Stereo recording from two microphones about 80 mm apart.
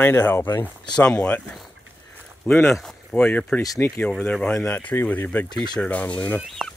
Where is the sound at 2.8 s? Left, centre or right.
Centre.